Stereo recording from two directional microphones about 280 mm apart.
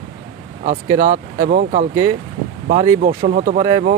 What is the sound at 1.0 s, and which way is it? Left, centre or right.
Speech, right.